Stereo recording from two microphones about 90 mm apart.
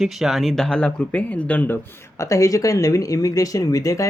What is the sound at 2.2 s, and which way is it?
Speech, 35° left (ahead or behind).